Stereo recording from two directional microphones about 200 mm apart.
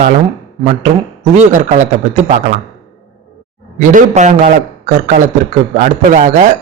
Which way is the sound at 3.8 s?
40° right (ahead or behind).